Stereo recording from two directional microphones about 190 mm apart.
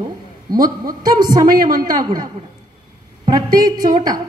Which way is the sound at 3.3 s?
20° right (ahead or behind).